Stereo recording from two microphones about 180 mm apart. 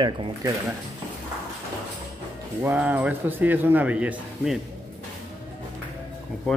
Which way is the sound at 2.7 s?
10° right (ahead or behind).